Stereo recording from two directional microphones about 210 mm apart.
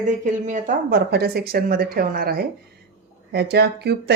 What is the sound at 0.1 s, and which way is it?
A woman's voice, 35° right (ahead or behind).